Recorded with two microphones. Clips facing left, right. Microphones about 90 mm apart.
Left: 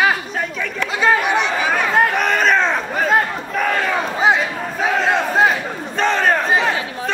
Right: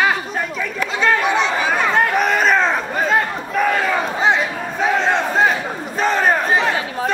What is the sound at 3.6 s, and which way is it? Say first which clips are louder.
Battle cry: right 2 dB; centre (ahead or behind).